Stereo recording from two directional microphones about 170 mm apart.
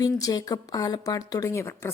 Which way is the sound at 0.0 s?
20° left (ahead or behind).